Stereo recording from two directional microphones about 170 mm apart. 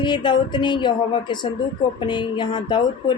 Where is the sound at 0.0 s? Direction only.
25° left (ahead or behind).